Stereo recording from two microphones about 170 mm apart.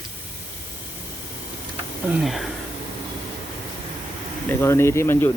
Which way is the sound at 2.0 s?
5° right (ahead or behind).